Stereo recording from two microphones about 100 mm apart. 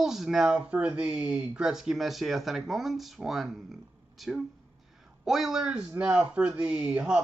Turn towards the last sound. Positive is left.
turn(degrees=-15)  # may be behind; listen again after turning